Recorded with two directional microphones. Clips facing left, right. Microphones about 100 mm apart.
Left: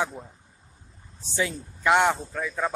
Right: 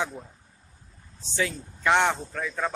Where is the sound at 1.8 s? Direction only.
10° left (ahead or behind).